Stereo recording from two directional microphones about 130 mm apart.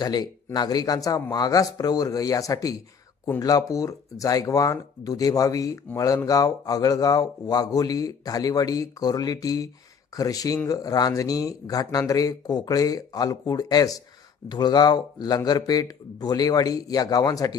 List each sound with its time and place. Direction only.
0.0 s a man's voice: 30° left (ahead or behind)